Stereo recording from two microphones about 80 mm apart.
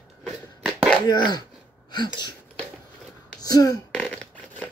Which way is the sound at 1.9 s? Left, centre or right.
Left.